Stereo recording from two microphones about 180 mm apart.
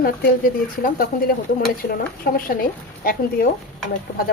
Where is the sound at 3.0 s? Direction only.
55° left (ahead or behind).